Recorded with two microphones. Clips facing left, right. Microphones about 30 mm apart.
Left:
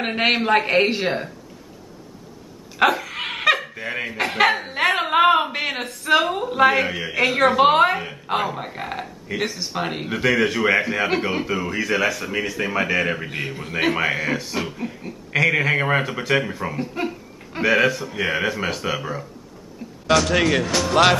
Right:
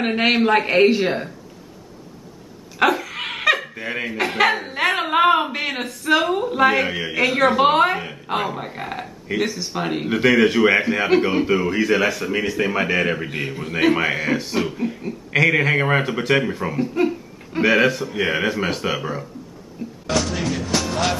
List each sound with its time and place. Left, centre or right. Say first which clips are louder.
0.0 s speech: right 2 dB; centre
2.8 s speech: even; centre
10.0 s speech: right 4 dB; centre
11.4 s speech: right 5 dB; centre
17.6 s speech: right 2 dB; centre
20.1 s speech: left 5 dB; left